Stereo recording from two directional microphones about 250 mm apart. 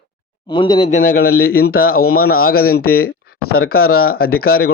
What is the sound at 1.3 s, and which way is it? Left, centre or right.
Speech, left.